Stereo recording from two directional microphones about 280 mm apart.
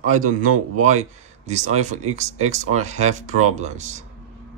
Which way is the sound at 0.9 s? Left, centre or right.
Right.